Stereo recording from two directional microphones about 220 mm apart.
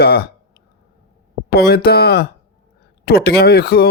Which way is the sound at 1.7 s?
45° left (ahead or behind).